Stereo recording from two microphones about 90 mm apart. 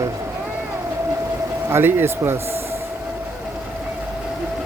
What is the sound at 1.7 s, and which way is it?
Speech, 25° right (ahead or behind).